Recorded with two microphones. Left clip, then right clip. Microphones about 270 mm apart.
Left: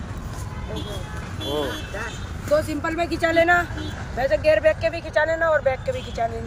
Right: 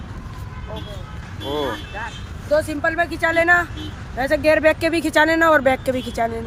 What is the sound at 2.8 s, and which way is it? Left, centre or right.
Speech, centre.